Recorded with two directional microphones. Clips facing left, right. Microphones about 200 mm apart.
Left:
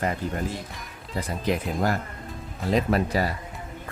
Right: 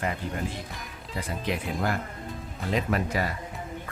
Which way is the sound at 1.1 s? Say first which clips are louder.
Left 4 dB; 40° left (ahead or behind).